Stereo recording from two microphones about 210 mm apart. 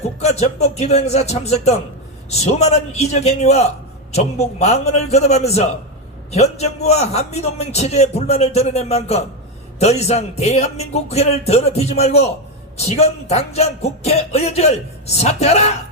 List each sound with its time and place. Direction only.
0.2 s speech: 30° left (ahead or behind)